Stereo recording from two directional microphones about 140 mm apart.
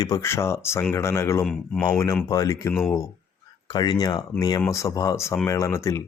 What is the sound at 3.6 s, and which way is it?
Speech, 35° left (ahead or behind).